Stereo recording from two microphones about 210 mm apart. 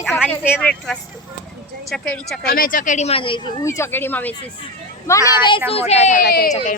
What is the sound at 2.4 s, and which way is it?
Speech, 45° left (ahead or behind).